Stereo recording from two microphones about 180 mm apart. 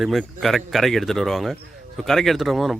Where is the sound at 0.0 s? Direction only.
Centre (ahead or behind).